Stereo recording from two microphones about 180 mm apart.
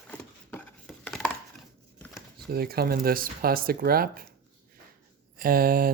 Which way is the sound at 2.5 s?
60° right (ahead or behind).